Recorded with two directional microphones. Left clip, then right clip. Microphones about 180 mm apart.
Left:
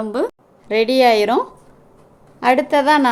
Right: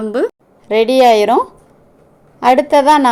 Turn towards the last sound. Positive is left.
turn(degrees=-15)  # may be behind; listen again after turning